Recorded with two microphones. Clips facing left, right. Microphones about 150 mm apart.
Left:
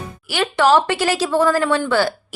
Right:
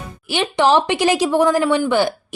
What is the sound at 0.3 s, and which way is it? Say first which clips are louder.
A woman's voice: even; 20° right (ahead or behind).